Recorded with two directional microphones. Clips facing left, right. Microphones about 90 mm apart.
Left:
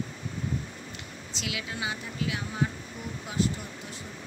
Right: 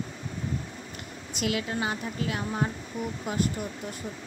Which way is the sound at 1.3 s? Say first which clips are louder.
Right 7 dB; 45° right (ahead or behind).